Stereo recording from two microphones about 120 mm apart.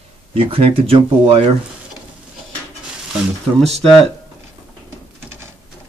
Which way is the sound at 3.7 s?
5° left (ahead or behind).